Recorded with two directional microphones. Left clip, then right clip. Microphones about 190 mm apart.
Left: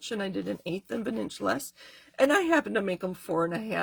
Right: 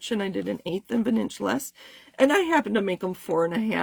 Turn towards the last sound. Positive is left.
turn(degrees=-45)  # may be behind; listen again after turning